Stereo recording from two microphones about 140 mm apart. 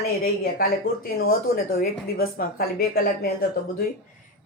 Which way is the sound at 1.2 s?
90° left.